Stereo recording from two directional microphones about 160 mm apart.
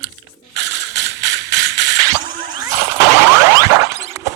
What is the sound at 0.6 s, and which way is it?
Mechanisms, 90° right.